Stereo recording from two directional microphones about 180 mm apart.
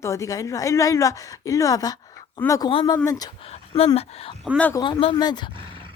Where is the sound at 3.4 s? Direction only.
35° left (ahead or behind).